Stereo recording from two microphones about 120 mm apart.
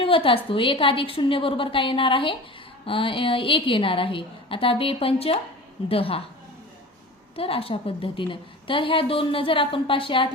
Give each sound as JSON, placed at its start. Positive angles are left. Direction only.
{"t": 0.0, "sound": "a woman's voice", "side_deg": 50}
{"t": 7.3, "sound": "a woman's voice", "side_deg": 50}